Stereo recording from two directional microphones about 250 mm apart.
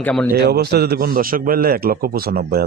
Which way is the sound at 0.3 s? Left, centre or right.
Right.